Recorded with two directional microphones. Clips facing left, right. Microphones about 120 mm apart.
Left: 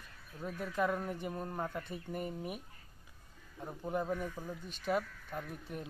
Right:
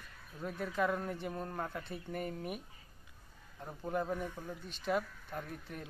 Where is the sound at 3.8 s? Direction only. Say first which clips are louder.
Even; 5° left (ahead or behind).